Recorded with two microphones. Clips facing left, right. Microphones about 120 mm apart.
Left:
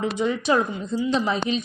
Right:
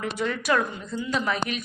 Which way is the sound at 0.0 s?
20° left (ahead or behind).